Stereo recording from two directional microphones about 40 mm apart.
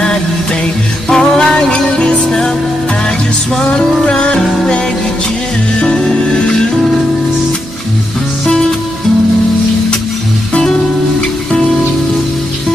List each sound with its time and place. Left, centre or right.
1.0 s music: centre
3.6 s music: centre
5.8 s music: left